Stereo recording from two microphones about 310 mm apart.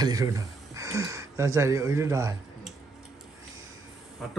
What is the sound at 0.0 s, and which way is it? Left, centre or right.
Speech, centre.